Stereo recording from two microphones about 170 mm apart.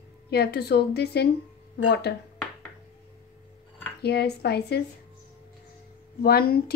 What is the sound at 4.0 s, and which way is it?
Speech, 75° left (ahead or behind).